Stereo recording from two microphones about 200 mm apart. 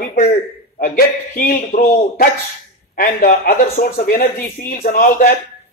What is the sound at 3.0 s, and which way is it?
Speech, 45° left (ahead or behind).